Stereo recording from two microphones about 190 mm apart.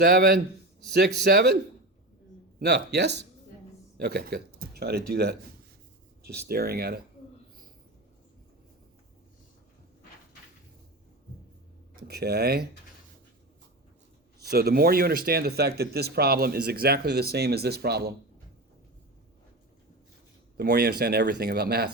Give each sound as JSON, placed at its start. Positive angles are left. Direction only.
{"t": 0.0, "sound": "speech", "side_deg": -55}
{"t": 2.6, "sound": "speech", "side_deg": -60}
{"t": 12.0, "sound": "speech", "side_deg": -55}
{"t": 14.5, "sound": "speech", "side_deg": -55}
{"t": 20.6, "sound": "speech", "side_deg": -55}